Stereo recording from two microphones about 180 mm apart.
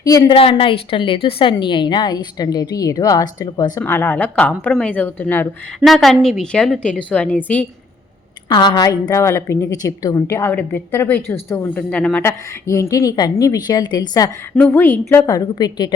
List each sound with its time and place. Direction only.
0.0 s a woman's voice: 20° left (ahead or behind)
0.3 s a woman's voice: 30° left (ahead or behind); by 7.7 s 10° left (ahead or behind)
8.4 s a woman's voice: 25° left (ahead or behind)
14.5 s a woman's voice: 10° left (ahead or behind)